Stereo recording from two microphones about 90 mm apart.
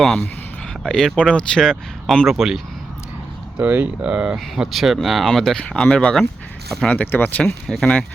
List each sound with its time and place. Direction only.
0.9 s speech: 5° left (ahead or behind)
3.6 s speech: 15° right (ahead or behind)
4.4 s speech: centre (ahead or behind); by 7.5 s 20° left (ahead or behind)
7.7 s speech: 10° left (ahead or behind)